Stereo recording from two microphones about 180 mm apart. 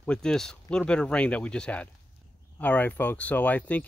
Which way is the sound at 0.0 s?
5° left (ahead or behind).